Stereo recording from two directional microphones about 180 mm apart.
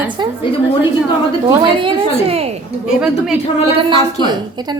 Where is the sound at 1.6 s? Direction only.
30° right (ahead or behind).